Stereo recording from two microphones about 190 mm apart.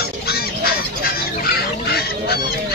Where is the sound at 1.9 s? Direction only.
55° left (ahead or behind).